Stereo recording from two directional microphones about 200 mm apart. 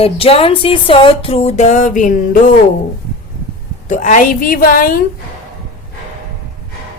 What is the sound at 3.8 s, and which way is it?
A woman's voice, 40° left (ahead or behind).